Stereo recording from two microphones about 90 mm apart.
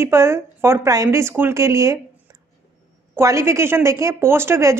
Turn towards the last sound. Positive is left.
turn(degrees=-30)  # may be behind; listen again after turning